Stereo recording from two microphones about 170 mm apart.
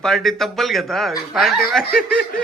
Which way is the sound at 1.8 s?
65° left (ahead or behind).